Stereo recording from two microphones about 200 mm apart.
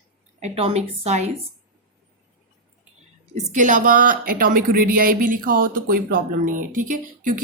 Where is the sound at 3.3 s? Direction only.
40° right (ahead or behind).